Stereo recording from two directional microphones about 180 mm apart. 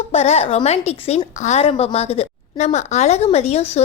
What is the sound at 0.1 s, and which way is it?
A woman's voice, 35° left (ahead or behind).